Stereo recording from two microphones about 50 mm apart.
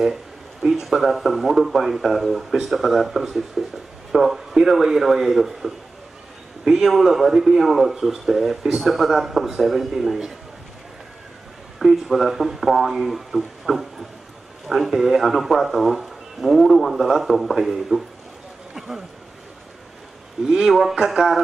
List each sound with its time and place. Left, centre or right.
0.0 s speech: centre
11.8 s speech: centre
13.7 s a sound: centre
14.7 s speech: centre
18.8 s a sound: centre
20.4 s speech: centre